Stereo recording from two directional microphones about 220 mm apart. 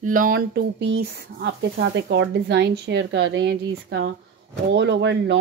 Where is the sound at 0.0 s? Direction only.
40° right (ahead or behind).